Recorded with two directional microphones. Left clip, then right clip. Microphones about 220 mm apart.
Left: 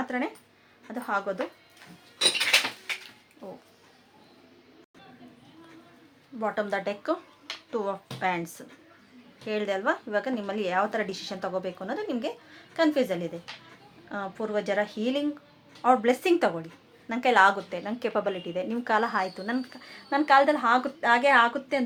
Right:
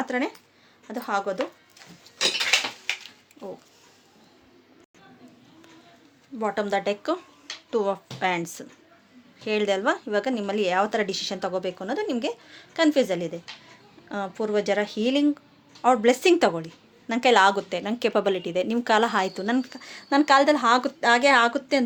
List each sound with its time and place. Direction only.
0.0 s speech: 45° right (ahead or behind)
6.4 s speech: 40° right (ahead or behind)